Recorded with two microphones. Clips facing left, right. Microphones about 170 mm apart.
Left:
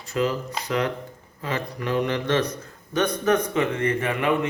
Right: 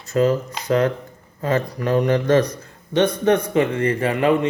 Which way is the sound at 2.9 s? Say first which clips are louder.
Right 5 dB; 30° right (ahead or behind).